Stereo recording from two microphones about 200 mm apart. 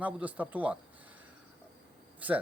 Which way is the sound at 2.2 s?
10° right (ahead or behind).